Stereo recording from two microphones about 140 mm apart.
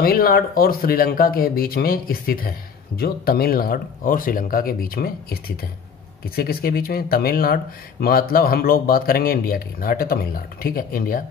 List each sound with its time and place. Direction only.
0.0 s speech: 90° left